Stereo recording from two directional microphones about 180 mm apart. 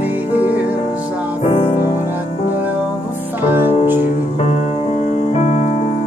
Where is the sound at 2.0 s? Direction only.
10° right (ahead or behind).